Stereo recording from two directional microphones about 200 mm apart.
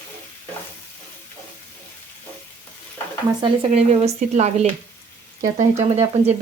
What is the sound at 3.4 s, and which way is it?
Speech, 30° right (ahead or behind).